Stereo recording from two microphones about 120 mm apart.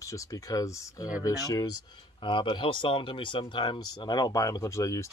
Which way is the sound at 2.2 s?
40° left (ahead or behind).